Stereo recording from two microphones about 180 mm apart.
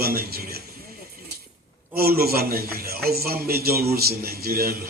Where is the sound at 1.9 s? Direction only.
55° right (ahead or behind).